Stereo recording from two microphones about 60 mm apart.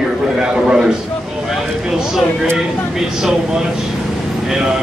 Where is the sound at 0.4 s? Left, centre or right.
Centre.